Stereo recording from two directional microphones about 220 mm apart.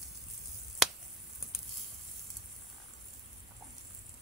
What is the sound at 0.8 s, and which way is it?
Finger snapping, centre (ahead or behind).